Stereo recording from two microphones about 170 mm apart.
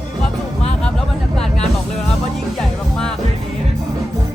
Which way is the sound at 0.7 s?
5° left (ahead or behind).